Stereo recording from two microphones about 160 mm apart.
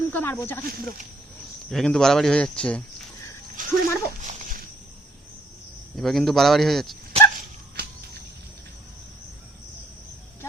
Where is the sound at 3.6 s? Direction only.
55° right (ahead or behind).